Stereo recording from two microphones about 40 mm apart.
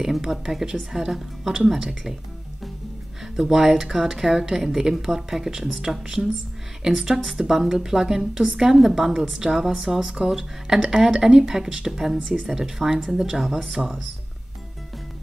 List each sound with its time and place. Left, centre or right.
0.0 s speech: centre
3.3 s speech: centre
8.2 s a woman's voice: right
8.5 s speech: centre